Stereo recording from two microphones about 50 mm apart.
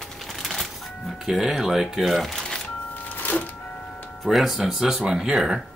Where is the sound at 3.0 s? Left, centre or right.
Left.